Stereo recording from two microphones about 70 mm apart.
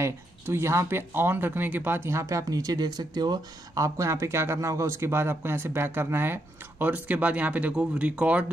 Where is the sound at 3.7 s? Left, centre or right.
Right.